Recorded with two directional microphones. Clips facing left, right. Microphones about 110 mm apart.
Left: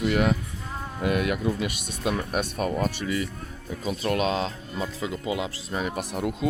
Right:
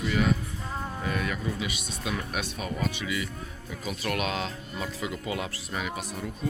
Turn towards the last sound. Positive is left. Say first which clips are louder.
# left 4 dB
turn(degrees=45)  # may be behind; listen again after turning